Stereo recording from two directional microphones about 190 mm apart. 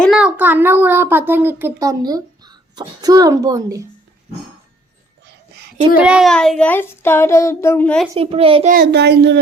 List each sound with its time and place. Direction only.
0.0 s a child's voice: 5° right (ahead or behind)
6.0 s a child's voice: 5° right (ahead or behind)
8.1 s a child's voice: 30° right (ahead or behind)
8.7 s speech: 60° right (ahead or behind)